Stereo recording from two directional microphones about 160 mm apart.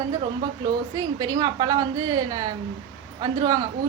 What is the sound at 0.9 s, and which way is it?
A woman's voice, 25° right (ahead or behind).